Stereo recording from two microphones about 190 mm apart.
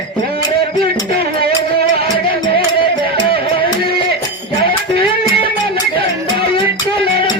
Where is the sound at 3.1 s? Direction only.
25° left (ahead or behind).